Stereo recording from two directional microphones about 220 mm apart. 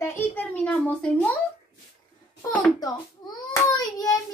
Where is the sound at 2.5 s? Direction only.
15° left (ahead or behind).